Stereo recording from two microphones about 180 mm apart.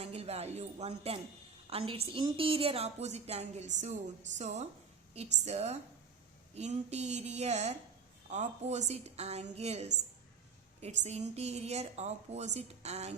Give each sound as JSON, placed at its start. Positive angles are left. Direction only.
{"t": 0.0, "sound": "a woman's voice", "side_deg": -35}